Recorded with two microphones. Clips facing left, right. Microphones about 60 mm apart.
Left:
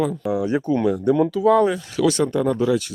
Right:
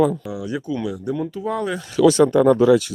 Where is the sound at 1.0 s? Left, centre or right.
Left.